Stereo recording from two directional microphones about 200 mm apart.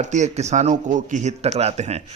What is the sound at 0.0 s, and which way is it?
A man's voice, 35° right (ahead or behind).